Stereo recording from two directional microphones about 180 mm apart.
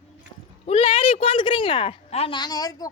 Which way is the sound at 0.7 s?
30° left (ahead or behind).